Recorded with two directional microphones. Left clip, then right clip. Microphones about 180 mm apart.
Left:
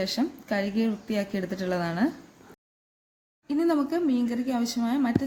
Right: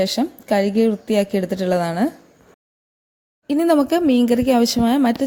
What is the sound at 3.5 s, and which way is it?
A woman's voice, 50° right (ahead or behind).